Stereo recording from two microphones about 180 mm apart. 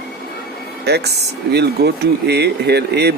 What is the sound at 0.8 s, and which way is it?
Speech, 65° right (ahead or behind).